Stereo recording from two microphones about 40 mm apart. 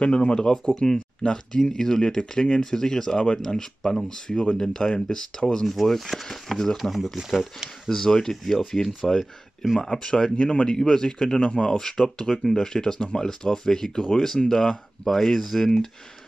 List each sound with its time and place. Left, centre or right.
0.0 s speech: left
5.7 s speech: centre
7.9 s speech: centre
11.7 s speech: centre